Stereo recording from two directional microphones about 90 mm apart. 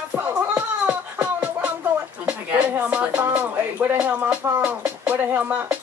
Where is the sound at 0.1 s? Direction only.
20° right (ahead or behind).